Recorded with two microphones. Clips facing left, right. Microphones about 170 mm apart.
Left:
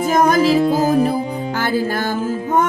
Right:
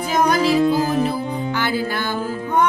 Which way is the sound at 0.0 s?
45° left (ahead or behind).